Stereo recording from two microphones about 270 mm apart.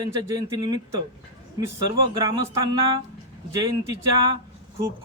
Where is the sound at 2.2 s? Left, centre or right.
Centre.